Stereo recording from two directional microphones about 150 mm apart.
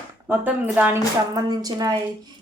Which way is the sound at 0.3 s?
10° right (ahead or behind).